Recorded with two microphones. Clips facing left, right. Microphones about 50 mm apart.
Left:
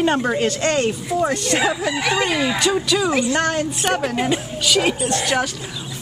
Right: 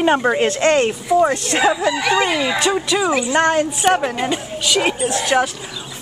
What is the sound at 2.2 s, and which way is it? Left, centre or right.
A woman's voice, centre.